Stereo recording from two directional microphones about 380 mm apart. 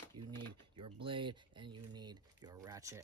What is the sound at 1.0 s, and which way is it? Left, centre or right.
Speech, centre.